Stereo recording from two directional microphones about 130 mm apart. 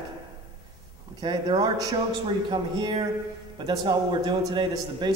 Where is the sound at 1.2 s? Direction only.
35° right (ahead or behind).